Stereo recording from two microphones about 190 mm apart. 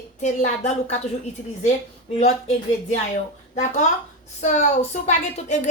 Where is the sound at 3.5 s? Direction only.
35° left (ahead or behind).